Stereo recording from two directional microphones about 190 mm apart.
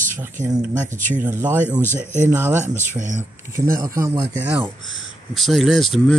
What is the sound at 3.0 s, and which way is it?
Speech, 40° right (ahead or behind).